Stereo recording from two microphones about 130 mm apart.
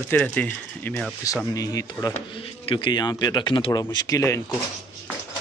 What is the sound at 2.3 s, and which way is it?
Speech, 40° left (ahead or behind).